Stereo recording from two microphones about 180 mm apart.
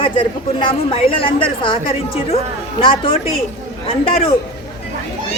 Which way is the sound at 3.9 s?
30° left (ahead or behind).